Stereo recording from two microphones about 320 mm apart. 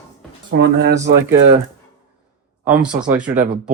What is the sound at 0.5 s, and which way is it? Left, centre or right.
Speech, right.